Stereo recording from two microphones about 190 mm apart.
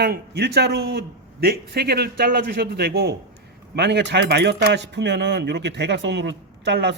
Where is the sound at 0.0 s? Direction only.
55° right (ahead or behind).